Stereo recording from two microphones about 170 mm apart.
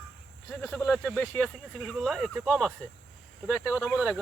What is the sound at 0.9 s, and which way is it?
Speech, 5° left (ahead or behind).